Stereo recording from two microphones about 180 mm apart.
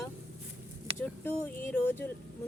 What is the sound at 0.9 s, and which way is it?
Speech, 10° left (ahead or behind).